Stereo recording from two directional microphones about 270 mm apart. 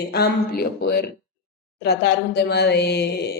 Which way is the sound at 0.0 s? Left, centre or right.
Left.